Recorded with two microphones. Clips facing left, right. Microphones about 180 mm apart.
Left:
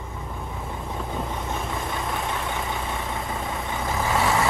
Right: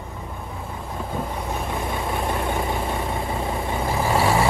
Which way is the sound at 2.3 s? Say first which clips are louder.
Right 5 dB; 35° right (ahead or behind).